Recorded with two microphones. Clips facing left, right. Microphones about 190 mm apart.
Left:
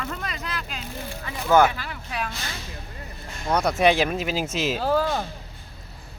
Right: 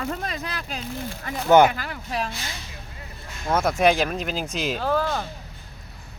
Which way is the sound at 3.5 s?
Centre (ahead or behind).